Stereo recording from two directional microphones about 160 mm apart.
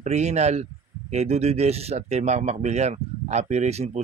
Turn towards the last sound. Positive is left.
turn(degrees=-40)  # may be behind; listen again after turning